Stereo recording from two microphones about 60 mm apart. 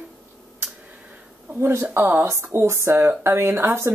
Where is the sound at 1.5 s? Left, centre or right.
Right.